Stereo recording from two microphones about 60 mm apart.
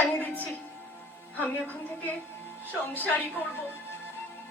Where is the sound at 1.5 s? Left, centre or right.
Left.